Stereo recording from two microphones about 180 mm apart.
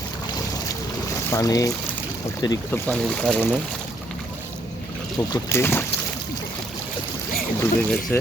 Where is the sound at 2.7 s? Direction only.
5° left (ahead or behind).